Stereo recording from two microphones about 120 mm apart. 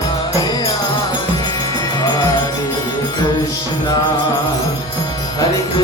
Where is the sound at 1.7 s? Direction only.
35° left (ahead or behind).